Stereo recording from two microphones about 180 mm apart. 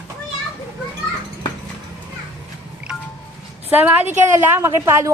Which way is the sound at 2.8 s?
5° right (ahead or behind).